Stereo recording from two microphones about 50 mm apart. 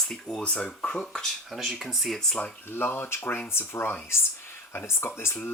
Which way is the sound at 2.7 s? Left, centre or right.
Left.